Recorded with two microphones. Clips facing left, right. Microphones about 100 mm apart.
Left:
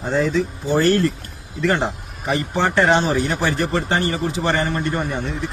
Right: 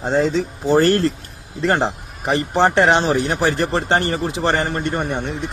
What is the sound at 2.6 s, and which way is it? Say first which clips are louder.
Speech: right 2 dB; 35° right (ahead or behind).